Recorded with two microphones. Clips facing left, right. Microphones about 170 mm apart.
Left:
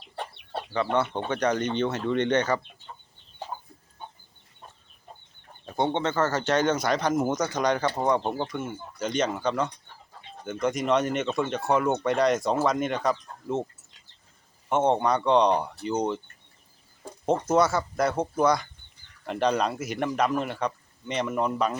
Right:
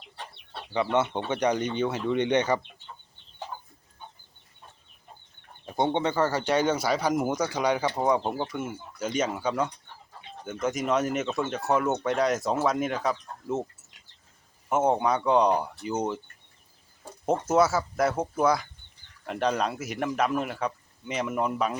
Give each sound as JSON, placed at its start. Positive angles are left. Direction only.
{"t": 0.7, "sound": "speech", "side_deg": -20}
{"t": 5.6, "sound": "speech", "side_deg": -15}
{"t": 14.7, "sound": "speech", "side_deg": -5}
{"t": 17.2, "sound": "speech", "side_deg": -5}